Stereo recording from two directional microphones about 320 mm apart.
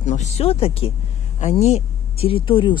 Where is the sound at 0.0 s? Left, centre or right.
Left.